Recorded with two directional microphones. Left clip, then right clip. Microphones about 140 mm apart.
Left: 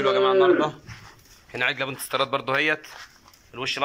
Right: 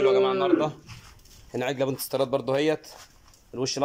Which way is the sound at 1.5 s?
40° right (ahead or behind).